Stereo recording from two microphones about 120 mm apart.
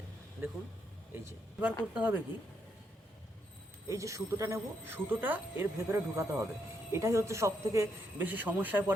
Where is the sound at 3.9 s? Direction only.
25° right (ahead or behind).